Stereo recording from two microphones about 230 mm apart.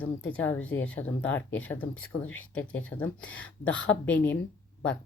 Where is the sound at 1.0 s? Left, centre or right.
Centre.